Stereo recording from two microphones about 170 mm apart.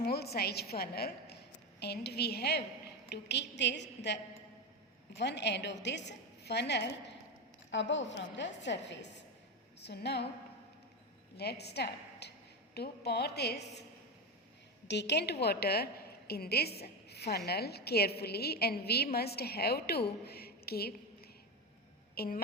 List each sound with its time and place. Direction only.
0.0 s a woman's voice: 70° left (ahead or behind)
3.1 s a woman's voice: 85° left
9.8 s a woman's voice: 75° left (ahead or behind)
11.3 s a woman's voice: 75° left (ahead or behind)
14.8 s a woman's voice: 90° left; by 22.4 s 65° left (ahead or behind)